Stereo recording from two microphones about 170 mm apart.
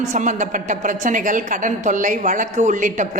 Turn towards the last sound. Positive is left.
turn(degrees=-50)  # may be behind; listen again after turning